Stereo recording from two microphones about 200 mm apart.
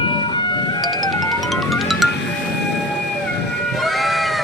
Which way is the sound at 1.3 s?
Centre (ahead or behind).